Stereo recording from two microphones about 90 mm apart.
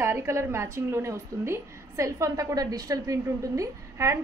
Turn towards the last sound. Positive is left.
turn(degrees=-35)  # may be behind; listen again after turning